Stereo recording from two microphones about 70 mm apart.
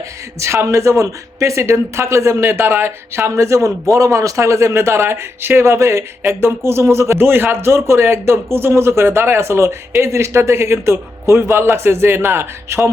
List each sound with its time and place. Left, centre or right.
0.3 s speech: right